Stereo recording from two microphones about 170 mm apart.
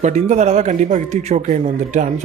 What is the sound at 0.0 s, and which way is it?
Speech, 45° right (ahead or behind).